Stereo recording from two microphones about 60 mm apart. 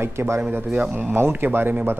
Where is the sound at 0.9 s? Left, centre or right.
Right.